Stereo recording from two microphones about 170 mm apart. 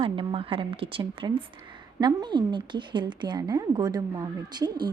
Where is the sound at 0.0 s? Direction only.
30° right (ahead or behind).